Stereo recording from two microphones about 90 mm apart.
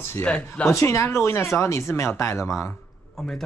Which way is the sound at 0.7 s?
30° left (ahead or behind).